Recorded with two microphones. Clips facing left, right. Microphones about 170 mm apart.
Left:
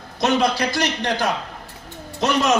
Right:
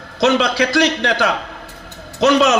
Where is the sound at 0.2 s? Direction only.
75° right (ahead or behind).